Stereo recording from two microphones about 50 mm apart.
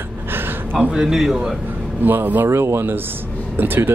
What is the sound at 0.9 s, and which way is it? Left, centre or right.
Speech, centre.